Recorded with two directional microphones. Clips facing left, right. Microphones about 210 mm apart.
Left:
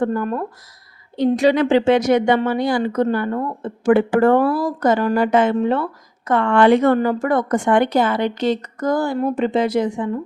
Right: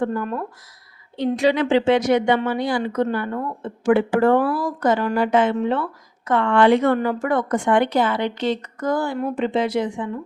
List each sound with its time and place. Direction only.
0.0 s a woman's voice: 45° left (ahead or behind)